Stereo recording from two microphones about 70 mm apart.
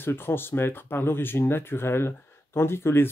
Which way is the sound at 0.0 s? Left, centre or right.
Left.